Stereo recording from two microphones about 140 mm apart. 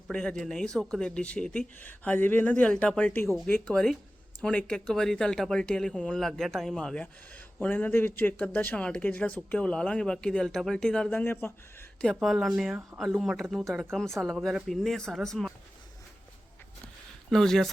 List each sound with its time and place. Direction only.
0.1 s speech: 5° left (ahead or behind)
3.2 s speech: centre (ahead or behind); by 11.9 s 15° left (ahead or behind)
11.9 s speech: centre (ahead or behind)
17.3 s speech: centre (ahead or behind)